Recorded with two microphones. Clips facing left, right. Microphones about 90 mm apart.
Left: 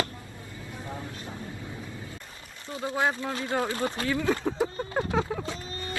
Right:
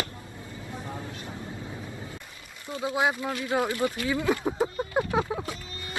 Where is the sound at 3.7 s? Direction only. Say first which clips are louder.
Right 2 dB; 35° left (ahead or behind).